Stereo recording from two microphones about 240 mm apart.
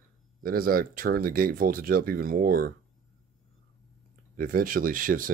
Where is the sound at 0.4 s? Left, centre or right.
Right.